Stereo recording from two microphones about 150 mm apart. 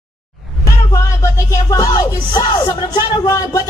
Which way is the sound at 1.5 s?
25° left (ahead or behind).